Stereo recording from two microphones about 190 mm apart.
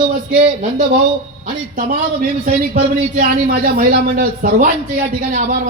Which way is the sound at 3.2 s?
50° right (ahead or behind).